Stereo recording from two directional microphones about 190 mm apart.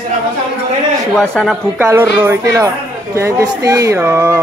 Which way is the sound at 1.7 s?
10° right (ahead or behind).